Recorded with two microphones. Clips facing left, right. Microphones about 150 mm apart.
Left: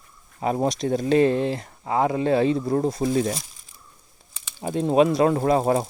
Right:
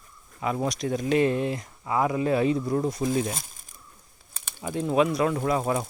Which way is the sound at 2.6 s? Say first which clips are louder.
Left 3 dB; 45° left (ahead or behind).